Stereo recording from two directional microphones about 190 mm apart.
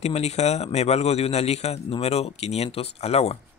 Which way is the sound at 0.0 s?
35° left (ahead or behind).